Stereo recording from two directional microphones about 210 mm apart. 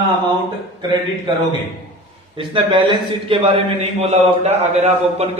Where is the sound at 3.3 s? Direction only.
25° right (ahead or behind).